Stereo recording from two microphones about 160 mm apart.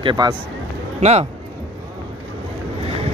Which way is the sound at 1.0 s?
45° right (ahead or behind).